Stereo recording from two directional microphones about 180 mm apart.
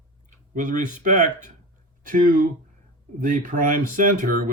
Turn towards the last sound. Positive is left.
turn(degrees=-50)  # may be behind; listen again after turning